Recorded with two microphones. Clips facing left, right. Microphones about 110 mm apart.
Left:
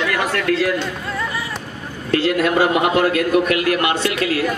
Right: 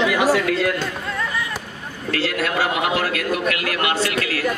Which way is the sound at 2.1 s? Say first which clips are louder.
Left 6 dB; 20° left (ahead or behind).